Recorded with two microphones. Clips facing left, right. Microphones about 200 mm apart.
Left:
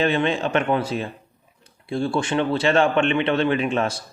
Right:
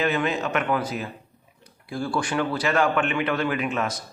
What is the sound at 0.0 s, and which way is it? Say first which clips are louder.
A man's voice: left 3 dB; 30° left (ahead or behind).